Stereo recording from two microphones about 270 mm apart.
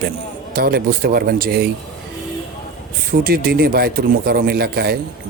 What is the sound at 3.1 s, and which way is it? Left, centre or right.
Speech, right.